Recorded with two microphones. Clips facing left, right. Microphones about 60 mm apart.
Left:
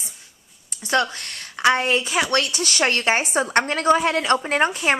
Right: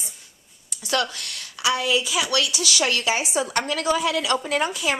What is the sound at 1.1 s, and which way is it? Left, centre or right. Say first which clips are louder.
A woman's voice: left 2 dB; left.